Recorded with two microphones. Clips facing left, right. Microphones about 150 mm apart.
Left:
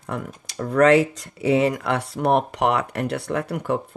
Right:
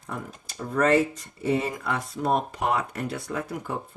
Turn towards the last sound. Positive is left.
turn(degrees=70)  # may be behind; listen again after turning